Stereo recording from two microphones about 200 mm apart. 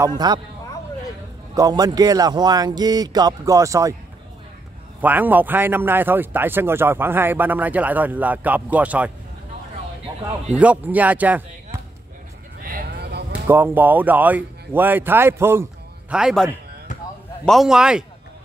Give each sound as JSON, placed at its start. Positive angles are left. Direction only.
{"t": 0.2, "sound": "a man's voice", "side_deg": -20}
{"t": 1.5, "sound": "a man's voice", "side_deg": -20}
{"t": 5.0, "sound": "a man's voice", "side_deg": -10}
{"t": 10.5, "sound": "a man's voice", "side_deg": -5}
{"t": 12.6, "sound": "vehicle", "side_deg": -50}
{"t": 13.5, "sound": "a man's voice", "side_deg": -10}
{"t": 17.5, "sound": "a man's voice", "side_deg": 0}